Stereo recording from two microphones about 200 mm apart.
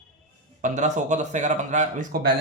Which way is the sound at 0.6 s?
35° right (ahead or behind).